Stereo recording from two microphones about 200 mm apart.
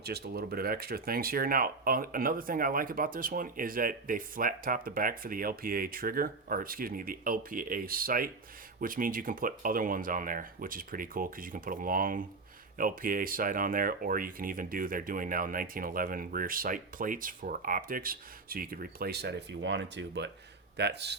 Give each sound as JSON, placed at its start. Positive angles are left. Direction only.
{"t": 0.0, "sound": "speech", "side_deg": -55}